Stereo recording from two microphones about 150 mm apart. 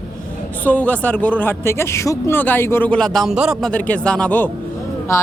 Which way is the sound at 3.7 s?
10° left (ahead or behind).